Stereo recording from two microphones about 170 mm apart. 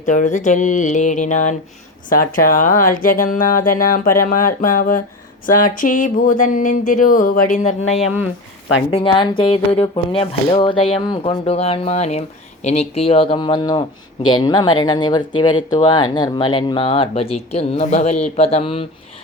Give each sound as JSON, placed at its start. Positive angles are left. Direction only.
{"t": 0.0, "sound": "speech", "side_deg": 50}
{"t": 7.9, "sound": "speech", "side_deg": -5}
{"t": 8.9, "sound": "speech", "side_deg": 30}